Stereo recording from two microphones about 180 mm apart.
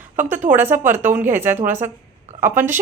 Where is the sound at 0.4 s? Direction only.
10° right (ahead or behind).